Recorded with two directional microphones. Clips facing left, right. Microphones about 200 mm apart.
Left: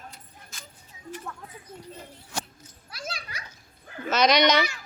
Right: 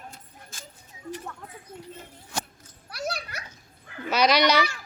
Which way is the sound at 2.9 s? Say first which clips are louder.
Right 6 dB; 65° right (ahead or behind).